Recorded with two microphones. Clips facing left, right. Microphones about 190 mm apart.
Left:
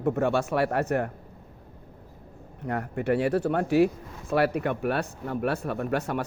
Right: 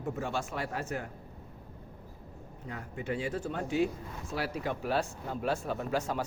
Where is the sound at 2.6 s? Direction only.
65° left (ahead or behind).